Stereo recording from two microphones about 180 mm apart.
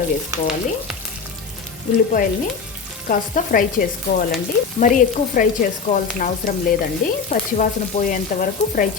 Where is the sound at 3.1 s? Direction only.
50° left (ahead or behind).